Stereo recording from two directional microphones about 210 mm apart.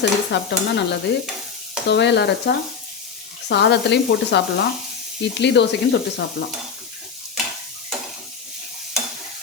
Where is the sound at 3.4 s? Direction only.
55° left (ahead or behind).